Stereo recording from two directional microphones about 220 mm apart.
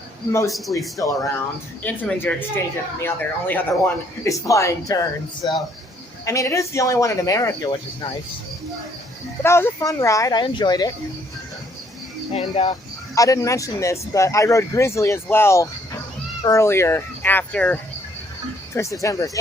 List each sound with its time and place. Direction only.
0.3 s speech: 15° left (ahead or behind)
9.4 s speech: 10° left (ahead or behind)
12.3 s speech: 25° left (ahead or behind)
13.1 s speech: 15° left (ahead or behind)